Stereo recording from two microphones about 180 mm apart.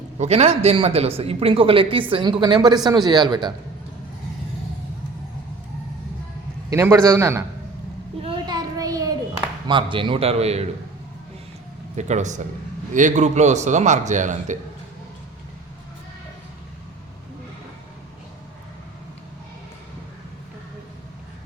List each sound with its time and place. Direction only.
0.2 s speech: 35° right (ahead or behind)
6.7 s a man's voice: 15° right (ahead or behind)
8.2 s child singing: 25° right (ahead or behind)
9.6 s a man's voice: 30° right (ahead or behind)
11.9 s a man's voice: 40° right (ahead or behind)